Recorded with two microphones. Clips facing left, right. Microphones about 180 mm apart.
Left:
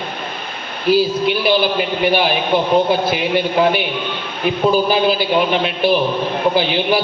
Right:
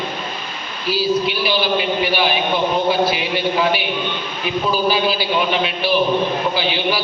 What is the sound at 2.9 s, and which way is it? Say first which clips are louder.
A man's voice: left 2 dB; 50° left (ahead or behind).